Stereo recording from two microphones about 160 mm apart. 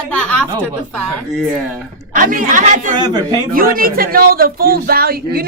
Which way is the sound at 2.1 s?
55° right (ahead or behind).